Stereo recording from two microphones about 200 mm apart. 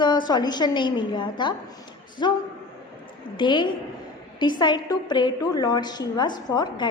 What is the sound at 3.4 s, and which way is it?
A woman's voice, 25° left (ahead or behind).